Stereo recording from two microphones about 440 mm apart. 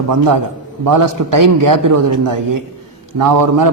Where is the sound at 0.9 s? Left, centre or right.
Right.